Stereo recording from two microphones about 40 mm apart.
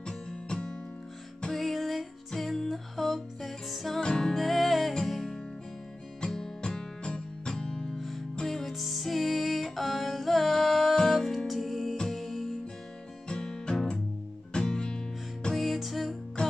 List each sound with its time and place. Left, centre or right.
0.0 s music: centre
1.5 s music: centre
4.0 s music: centre
4.3 s music: centre
6.2 s music: centre
8.5 s music: centre
11.4 s music: centre
13.3 s music: centre
15.5 s music: centre
16.4 s music: left